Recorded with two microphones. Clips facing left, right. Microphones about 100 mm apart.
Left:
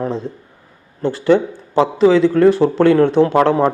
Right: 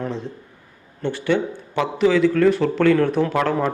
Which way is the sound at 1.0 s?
35° left (ahead or behind).